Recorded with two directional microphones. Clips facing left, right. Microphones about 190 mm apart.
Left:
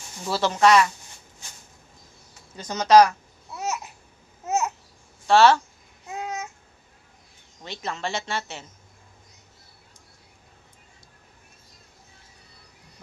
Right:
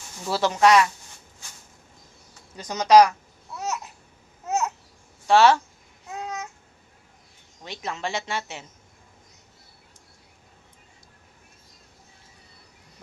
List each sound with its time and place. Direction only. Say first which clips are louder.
0.3 s a woman's voice: even; 15° right (ahead or behind)
2.6 s a woman's voice: even; 15° right (ahead or behind)
4.4 s babbling: left 1 dB; 5° left (ahead or behind)
5.3 s a woman's voice: even; 15° right (ahead or behind)
6.1 s babbling: left 1 dB; 5° left (ahead or behind)
7.6 s a woman's voice: even; 15° right (ahead or behind)